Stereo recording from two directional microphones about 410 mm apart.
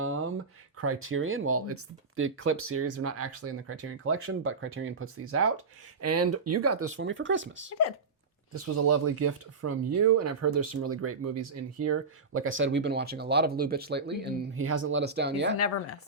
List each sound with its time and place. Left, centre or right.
0.0 s a sound: right
0.8 s speech: right
8.6 s speech: right
15.5 s speech: left